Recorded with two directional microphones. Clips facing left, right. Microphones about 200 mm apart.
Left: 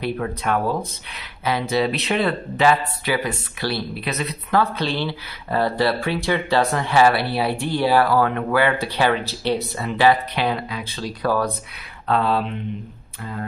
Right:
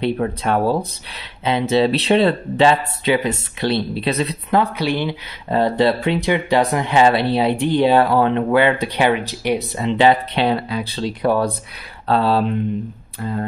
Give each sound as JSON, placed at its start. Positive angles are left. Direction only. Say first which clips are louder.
{"t": 0.0, "sound": "speech", "louder": "right 4 dB", "side_deg": -30}
{"t": 4.7, "sound": "speech", "louder": "right 4 dB", "side_deg": -15}
{"t": 12.1, "sound": "a sound", "louder": "right 4 dB", "side_deg": -35}